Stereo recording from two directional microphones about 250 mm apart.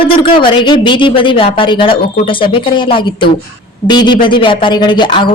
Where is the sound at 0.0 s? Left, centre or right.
Left.